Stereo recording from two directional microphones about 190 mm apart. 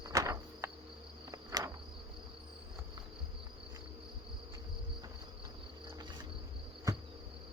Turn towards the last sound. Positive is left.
turn(degrees=-15)  # may be behind; listen again after turning